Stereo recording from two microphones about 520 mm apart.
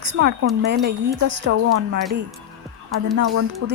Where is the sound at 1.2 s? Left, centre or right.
Right.